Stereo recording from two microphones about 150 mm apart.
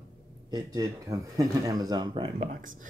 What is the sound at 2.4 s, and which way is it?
Speech, 60° right (ahead or behind).